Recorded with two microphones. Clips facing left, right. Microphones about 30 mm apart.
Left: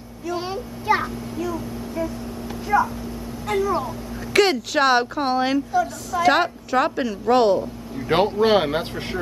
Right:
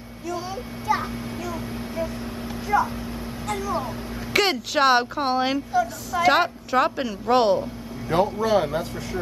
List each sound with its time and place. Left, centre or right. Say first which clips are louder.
1.0 s a sound: left 3 dB; centre
2.7 s speech: left 2 dB; centre
4.3 s speech: left 4 dB; centre
8.1 s speech: left 3 dB; left